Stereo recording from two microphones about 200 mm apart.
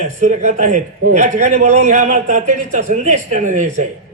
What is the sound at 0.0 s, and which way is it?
A man's voice, 35° right (ahead or behind).